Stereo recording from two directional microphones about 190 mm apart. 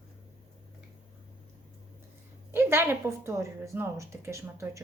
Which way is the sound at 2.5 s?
15° right (ahead or behind).